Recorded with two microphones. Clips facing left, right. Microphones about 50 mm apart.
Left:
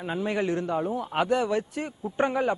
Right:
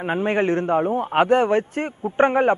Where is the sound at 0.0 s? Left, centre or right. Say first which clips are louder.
Right 7 dB; right.